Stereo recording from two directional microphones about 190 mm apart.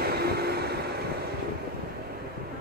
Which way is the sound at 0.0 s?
55° right (ahead or behind).